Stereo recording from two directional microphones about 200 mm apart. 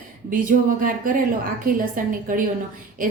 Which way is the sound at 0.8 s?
45° right (ahead or behind).